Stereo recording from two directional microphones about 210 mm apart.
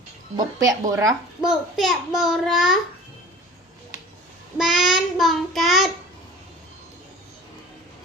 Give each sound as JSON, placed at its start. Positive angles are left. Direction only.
{"t": 0.3, "sound": "speech", "side_deg": -15}
{"t": 1.4, "sound": "a child's voice", "side_deg": 0}
{"t": 4.5, "sound": "a child's voice", "side_deg": 0}